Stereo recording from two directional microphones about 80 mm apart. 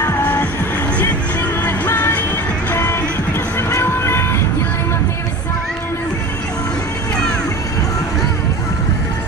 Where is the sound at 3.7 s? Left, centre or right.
Left.